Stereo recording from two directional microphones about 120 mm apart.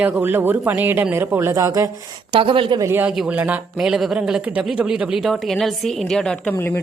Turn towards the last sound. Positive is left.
turn(degrees=20)  # may be behind; listen again after turning